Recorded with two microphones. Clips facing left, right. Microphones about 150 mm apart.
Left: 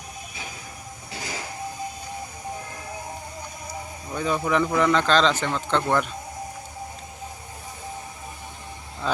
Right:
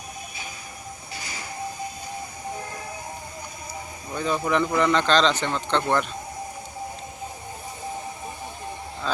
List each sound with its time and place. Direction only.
1.1 s train: 90° left
4.1 s speech: 5° left (ahead or behind)
9.1 s a sound: 15° left (ahead or behind)